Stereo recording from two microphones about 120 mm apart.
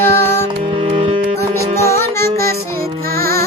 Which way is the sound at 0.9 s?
55° right (ahead or behind).